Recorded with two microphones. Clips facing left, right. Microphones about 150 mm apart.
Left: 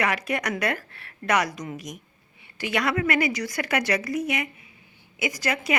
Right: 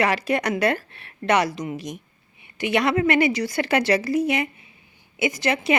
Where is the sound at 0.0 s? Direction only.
30° right (ahead or behind).